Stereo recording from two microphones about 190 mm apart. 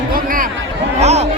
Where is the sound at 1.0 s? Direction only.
35° right (ahead or behind).